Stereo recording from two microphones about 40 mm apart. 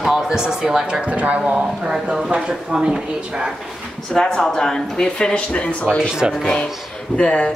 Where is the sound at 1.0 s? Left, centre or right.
Right.